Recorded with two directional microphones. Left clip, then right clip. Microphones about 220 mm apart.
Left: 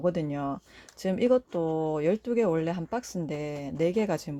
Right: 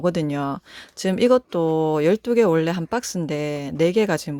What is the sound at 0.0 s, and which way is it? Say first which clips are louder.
Speech: right 6 dB; 30° right (ahead or behind).